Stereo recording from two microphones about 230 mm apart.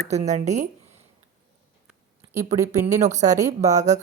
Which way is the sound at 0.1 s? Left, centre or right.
Right.